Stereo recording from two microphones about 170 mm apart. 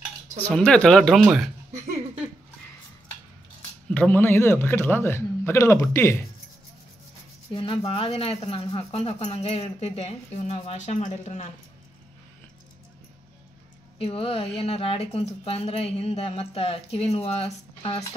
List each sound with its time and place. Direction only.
0.4 s speech: 5° left (ahead or behind)
3.9 s a man's voice: 10° left (ahead or behind)
7.5 s speech: 35° left (ahead or behind)
13.9 s speech: 35° left (ahead or behind)